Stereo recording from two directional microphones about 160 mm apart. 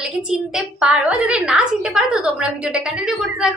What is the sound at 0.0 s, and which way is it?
A woman's voice, 5° right (ahead or behind).